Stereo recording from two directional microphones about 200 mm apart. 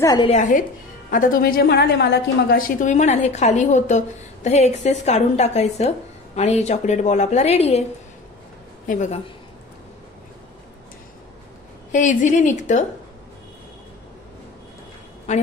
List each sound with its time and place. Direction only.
0.0 s a woman's voice: 20° left (ahead or behind)
0.3 s a woman's voice: 40° left (ahead or behind)
8.8 s a woman's voice: 40° left (ahead or behind)
11.9 s a woman's voice: 40° left (ahead or behind)
15.3 s a woman's voice: 35° left (ahead or behind)